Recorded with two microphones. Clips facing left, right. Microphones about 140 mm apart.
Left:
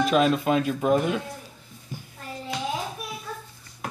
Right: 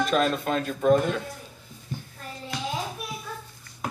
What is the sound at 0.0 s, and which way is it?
Speech, 5° left (ahead or behind).